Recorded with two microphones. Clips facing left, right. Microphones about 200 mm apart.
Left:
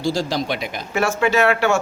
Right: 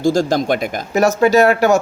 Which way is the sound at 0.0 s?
45° right (ahead or behind).